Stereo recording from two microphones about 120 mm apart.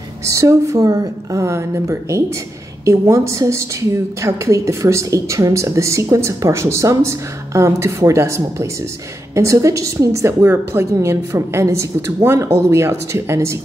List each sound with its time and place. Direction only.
0.3 s a woman's voice: 25° right (ahead or behind)